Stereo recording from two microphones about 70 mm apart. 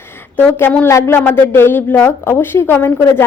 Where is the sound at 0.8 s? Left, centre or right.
Left.